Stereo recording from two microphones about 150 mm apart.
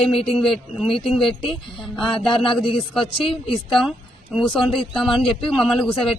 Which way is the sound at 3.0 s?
35° left (ahead or behind).